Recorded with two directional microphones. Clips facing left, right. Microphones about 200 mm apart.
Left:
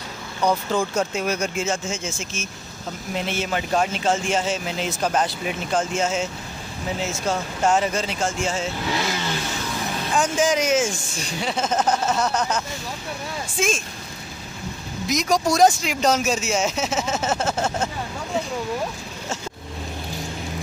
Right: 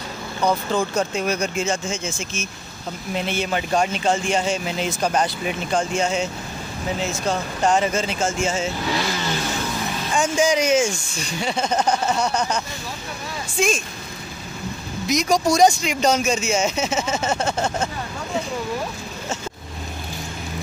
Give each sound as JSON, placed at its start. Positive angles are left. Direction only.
{"t": 0.5, "sound": "speech", "side_deg": 10}
{"t": 10.1, "sound": "speech", "side_deg": 0}
{"t": 15.0, "sound": "speech", "side_deg": 0}